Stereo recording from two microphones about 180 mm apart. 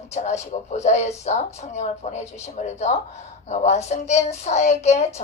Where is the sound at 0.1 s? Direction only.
40° left (ahead or behind).